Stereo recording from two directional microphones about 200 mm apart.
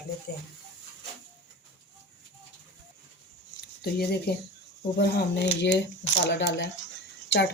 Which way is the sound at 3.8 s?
50° left (ahead or behind).